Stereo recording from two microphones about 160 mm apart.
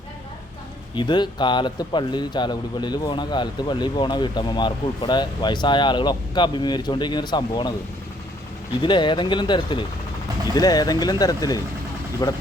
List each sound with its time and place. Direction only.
0.9 s a man's voice: 30° left (ahead or behind)
8.8 s a man's voice: 30° left (ahead or behind)